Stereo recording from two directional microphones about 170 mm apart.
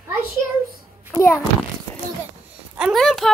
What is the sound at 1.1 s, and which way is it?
Speech, 15° left (ahead or behind).